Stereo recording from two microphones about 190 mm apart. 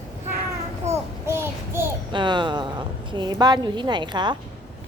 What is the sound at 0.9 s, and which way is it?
Child singing, 15° right (ahead or behind).